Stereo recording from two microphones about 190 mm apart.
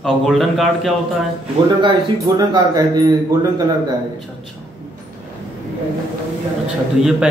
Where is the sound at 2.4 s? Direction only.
20° right (ahead or behind).